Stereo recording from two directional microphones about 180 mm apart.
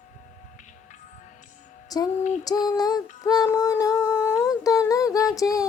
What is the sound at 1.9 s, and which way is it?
Music, 20° left (ahead or behind).